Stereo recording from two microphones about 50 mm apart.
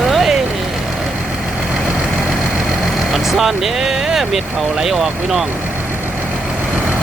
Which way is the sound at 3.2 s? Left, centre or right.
Centre.